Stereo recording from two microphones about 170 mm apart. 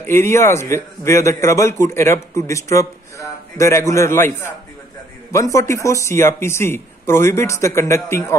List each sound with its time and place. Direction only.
0.0 s a man's voice: 15° left (ahead or behind)